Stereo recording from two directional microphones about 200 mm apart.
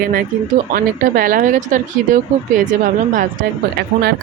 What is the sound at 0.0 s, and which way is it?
Speech, 45° right (ahead or behind).